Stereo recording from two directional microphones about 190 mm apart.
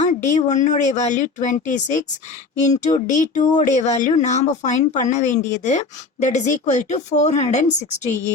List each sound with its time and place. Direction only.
0.0 s speech: 40° left (ahead or behind)